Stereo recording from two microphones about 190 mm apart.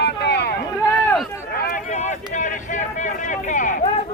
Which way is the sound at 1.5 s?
40° left (ahead or behind).